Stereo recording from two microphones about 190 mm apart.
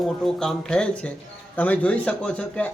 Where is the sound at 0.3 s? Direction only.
5° left (ahead or behind).